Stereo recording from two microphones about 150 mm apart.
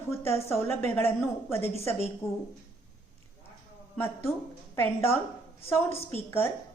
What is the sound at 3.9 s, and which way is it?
A woman's voice, 15° left (ahead or behind).